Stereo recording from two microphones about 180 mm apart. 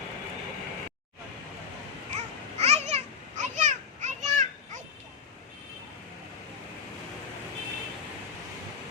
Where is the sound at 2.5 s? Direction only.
35° right (ahead or behind).